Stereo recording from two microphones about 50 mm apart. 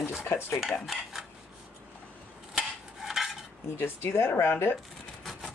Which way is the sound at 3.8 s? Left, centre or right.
Left.